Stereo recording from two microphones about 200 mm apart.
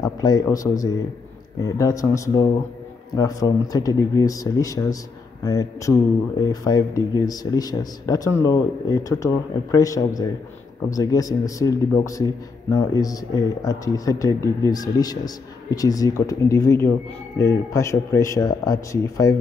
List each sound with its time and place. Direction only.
0.0 s a man's voice: 20° left (ahead or behind)